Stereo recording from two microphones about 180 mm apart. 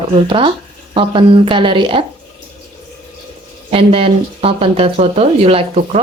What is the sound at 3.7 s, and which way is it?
Speech, 30° right (ahead or behind).